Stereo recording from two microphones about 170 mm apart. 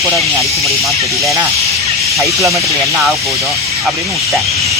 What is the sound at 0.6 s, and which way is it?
Speech, centre (ahead or behind).